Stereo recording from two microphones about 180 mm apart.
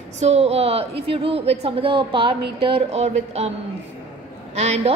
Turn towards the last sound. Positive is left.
turn(degrees=-35)  # may be behind; listen again after turning